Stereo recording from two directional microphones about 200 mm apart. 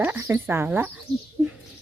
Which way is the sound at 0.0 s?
10° right (ahead or behind).